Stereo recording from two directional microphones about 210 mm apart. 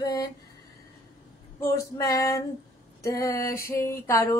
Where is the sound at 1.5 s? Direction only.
15° left (ahead or behind).